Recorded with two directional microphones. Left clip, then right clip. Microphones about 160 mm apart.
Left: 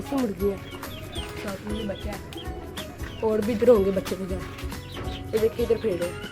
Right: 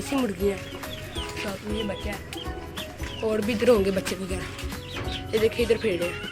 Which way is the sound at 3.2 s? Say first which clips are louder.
Left 2 dB; 20° left (ahead or behind).